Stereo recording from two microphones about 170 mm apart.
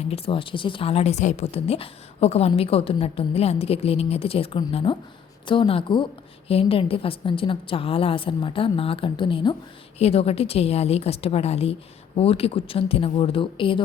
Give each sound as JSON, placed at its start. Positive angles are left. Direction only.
{"t": 0.1, "sound": "a woman's voice", "side_deg": 30}